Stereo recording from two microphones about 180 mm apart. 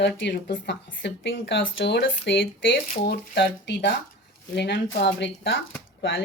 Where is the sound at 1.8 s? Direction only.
70° left (ahead or behind); by 2.7 s 90° left.